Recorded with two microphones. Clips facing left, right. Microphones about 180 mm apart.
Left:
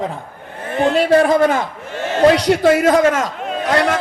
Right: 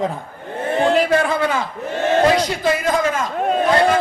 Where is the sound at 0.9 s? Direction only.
30° left (ahead or behind).